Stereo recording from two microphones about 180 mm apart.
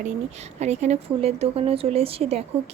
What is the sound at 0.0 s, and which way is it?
A woman's voice, 40° right (ahead or behind).